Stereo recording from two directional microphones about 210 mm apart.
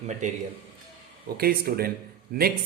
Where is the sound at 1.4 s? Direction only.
45° right (ahead or behind).